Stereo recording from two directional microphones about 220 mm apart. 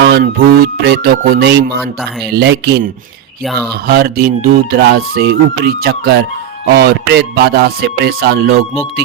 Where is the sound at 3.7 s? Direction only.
45° right (ahead or behind).